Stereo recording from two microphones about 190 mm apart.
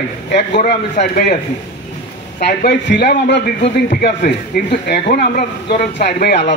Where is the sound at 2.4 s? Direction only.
65° left (ahead or behind).